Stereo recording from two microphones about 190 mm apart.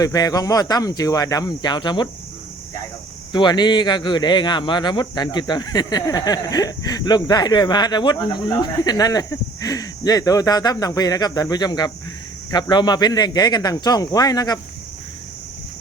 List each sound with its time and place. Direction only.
0.0 s a man's voice: 20° left (ahead or behind)
3.3 s a man's voice: 25° left (ahead or behind)